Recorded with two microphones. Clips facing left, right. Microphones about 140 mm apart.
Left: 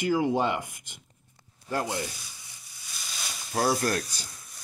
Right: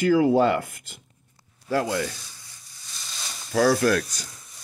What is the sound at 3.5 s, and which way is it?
Speech, 90° right.